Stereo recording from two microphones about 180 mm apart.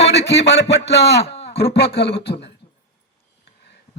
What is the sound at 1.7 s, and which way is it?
Beatboxing, 65° left (ahead or behind).